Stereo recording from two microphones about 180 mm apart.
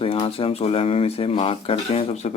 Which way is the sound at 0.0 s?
30° left (ahead or behind).